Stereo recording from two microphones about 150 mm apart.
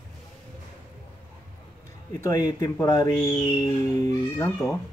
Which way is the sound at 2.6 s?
20° left (ahead or behind).